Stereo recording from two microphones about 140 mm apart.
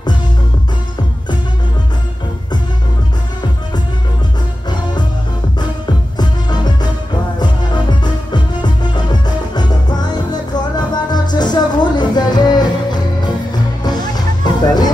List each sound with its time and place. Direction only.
6.1 s music: 30° left (ahead or behind)
14.4 s music: 30° left (ahead or behind)